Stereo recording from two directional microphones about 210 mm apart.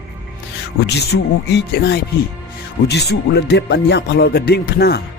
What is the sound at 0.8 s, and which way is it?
Speech, 55° left (ahead or behind).